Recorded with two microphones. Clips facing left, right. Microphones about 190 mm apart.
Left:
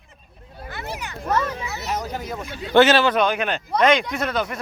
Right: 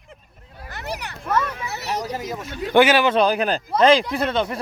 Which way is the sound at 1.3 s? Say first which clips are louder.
Even; 25° left (ahead or behind).